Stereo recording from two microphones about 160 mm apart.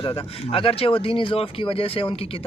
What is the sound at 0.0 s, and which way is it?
A man's voice, 35° left (ahead or behind).